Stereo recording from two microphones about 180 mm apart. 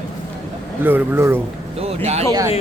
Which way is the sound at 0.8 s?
10° right (ahead or behind).